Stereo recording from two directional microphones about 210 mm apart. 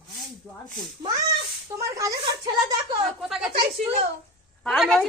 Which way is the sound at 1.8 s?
15° right (ahead or behind).